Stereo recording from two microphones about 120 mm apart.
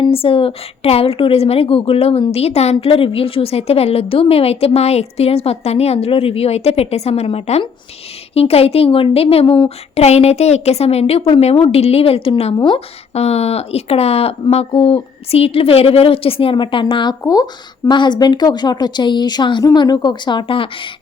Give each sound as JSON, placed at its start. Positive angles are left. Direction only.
{"t": 0.0, "sound": "a woman's voice", "side_deg": 50}